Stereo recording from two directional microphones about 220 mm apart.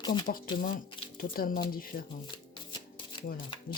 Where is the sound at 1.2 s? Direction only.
40° left (ahead or behind).